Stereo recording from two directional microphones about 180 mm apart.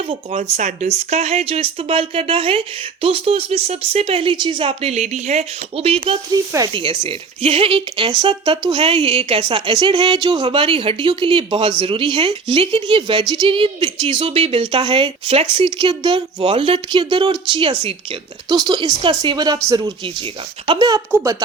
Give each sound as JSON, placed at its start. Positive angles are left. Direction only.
{"t": 0.5, "sound": "speech", "side_deg": -40}
{"t": 6.3, "sound": "a woman's voice", "side_deg": -20}
{"t": 20.7, "sound": "a woman's voice", "side_deg": -20}